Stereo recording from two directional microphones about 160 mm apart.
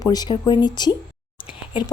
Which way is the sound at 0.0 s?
25° left (ahead or behind).